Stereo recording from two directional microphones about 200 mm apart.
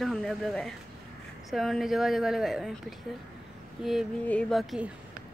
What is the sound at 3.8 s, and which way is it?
Speech, centre (ahead or behind).